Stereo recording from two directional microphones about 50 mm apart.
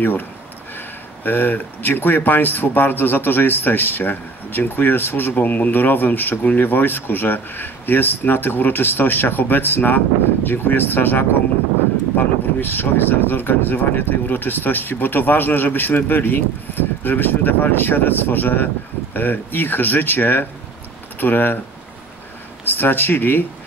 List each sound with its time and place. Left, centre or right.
0.0 s speech: left
22.7 s speech: left